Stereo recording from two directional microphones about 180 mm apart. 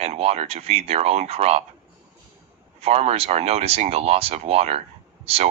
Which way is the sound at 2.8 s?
35° right (ahead or behind).